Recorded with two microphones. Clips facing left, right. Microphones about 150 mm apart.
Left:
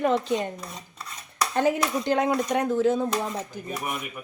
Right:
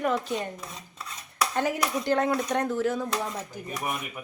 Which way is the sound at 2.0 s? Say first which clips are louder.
Left 1 dB; 15° left (ahead or behind).